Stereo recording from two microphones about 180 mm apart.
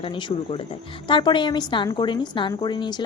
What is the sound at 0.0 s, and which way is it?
A woman's voice, 30° left (ahead or behind).